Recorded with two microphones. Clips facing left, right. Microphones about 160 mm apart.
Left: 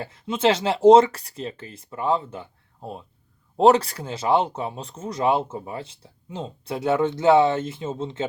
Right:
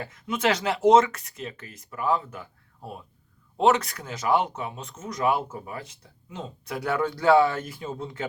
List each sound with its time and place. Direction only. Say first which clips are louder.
0.0 s speech: left 4 dB; 30° left (ahead or behind)